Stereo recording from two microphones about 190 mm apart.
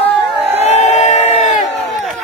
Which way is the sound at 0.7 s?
35° left (ahead or behind).